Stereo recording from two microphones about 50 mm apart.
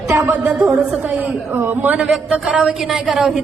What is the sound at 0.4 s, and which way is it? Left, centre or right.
Speech, right.